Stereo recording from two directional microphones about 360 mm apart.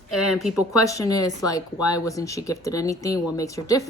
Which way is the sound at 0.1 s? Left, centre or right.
Left.